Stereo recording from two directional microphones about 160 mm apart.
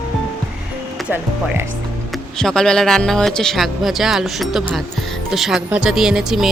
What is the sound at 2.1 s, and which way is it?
Speech, 5° left (ahead or behind).